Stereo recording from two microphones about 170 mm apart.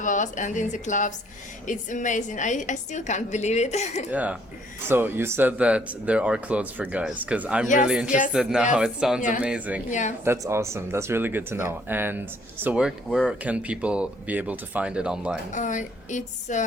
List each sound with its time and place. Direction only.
0.0 s a woman's voice: 50° left (ahead or behind)
4.1 s speech: 10° right (ahead or behind)
9.9 s a woman's voice: 45° left (ahead or behind)
10.2 s speech: 15° right (ahead or behind)
15.5 s a woman's voice: 45° left (ahead or behind)